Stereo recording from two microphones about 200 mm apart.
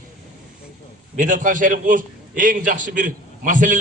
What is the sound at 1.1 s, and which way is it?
A man's voice, 40° right (ahead or behind).